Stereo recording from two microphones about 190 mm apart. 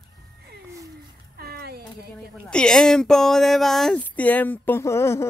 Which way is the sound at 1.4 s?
55° right (ahead or behind).